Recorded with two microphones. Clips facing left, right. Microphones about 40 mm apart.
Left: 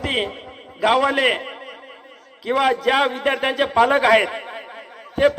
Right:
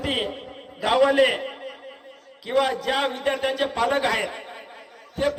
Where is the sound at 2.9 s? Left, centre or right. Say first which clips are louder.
Left 6 dB; left.